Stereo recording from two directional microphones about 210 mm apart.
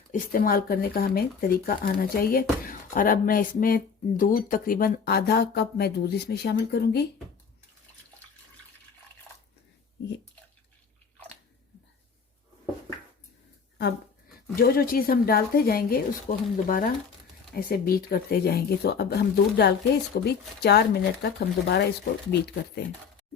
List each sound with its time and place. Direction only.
0.1 s speech: 45° left (ahead or behind)
14.5 s speech: 45° left (ahead or behind)